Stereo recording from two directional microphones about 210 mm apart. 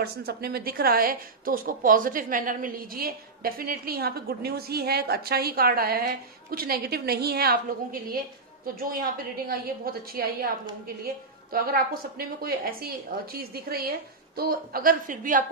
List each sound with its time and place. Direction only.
0.0 s a woman's voice: 45° right (ahead or behind)
9.5 s a woman's voice: 45° right (ahead or behind)
11.5 s a woman's voice: 45° right (ahead or behind)